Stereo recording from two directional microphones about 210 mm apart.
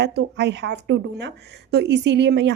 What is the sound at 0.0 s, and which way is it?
Speech, 55° right (ahead or behind).